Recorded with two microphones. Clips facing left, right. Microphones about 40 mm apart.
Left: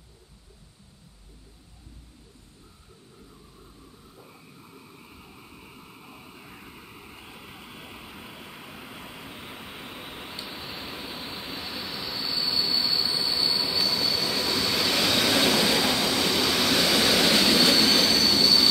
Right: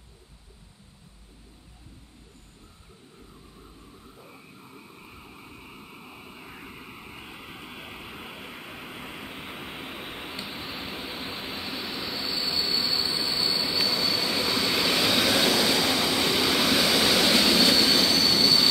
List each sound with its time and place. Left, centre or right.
4.2 s vehicle: centre
13.7 s train: centre